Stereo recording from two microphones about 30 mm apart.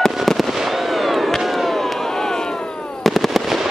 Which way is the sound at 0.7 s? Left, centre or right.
Centre.